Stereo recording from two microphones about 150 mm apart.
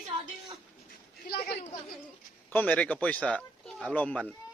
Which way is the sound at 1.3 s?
90° left.